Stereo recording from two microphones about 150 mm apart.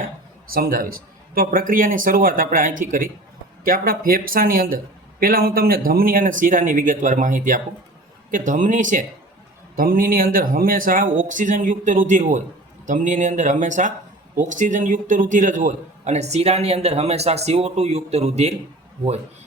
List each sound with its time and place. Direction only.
0.5 s a man's voice: 70° right (ahead or behind)
9.7 s a man's voice: 70° right (ahead or behind); by 18.5 s 45° right (ahead or behind)